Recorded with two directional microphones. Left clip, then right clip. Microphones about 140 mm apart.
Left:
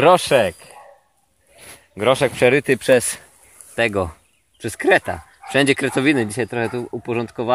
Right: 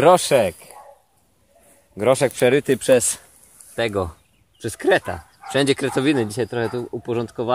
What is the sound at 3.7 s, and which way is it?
Speech, 40° left (ahead or behind).